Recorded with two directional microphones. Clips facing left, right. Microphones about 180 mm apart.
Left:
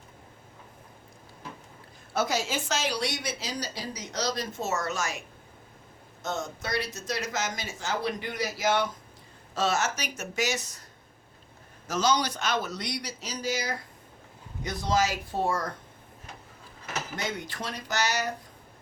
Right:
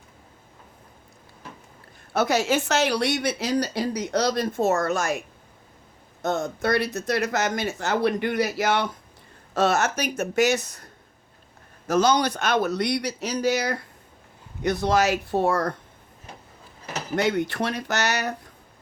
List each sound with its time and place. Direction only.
2.1 s speech: 65° right (ahead or behind)
6.2 s speech: 60° right (ahead or behind)
11.9 s speech: 55° right (ahead or behind)
17.2 s speech: 65° right (ahead or behind)